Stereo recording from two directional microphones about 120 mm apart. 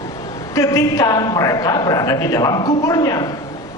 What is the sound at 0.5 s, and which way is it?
A man's voice, 25° left (ahead or behind).